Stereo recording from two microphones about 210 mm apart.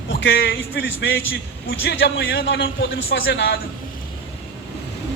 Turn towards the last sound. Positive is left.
turn(degrees=60)  # may be behind; listen again after turning